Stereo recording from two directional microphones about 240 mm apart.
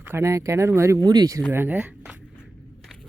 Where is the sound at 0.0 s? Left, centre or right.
Centre.